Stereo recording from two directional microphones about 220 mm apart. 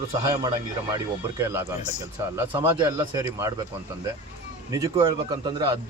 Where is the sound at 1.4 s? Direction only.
10° right (ahead or behind).